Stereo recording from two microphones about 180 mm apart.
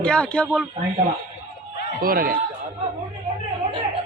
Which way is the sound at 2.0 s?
55° right (ahead or behind).